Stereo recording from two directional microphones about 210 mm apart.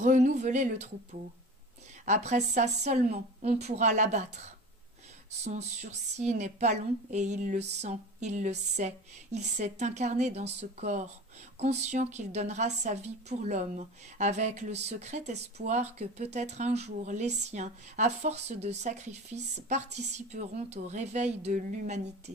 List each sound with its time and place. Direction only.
0.0 s a woman's voice: 35° right (ahead or behind)
2.0 s a woman's voice: 35° right (ahead or behind)